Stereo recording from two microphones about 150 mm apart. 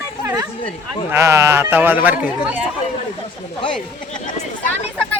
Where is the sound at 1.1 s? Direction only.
20° right (ahead or behind).